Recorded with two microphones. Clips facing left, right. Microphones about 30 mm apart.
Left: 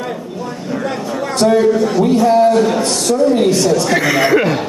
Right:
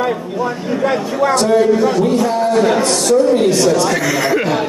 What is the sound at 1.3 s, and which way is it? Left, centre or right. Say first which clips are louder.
A man's voice: left 2 dB; centre.